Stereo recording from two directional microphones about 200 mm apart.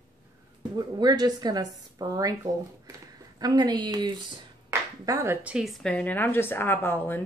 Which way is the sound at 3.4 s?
20° right (ahead or behind).